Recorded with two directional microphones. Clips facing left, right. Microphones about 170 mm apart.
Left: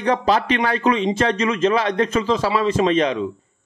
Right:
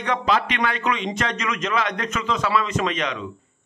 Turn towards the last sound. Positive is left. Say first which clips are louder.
# left 7 dB
turn(degrees=35)  # may be behind; listen again after turning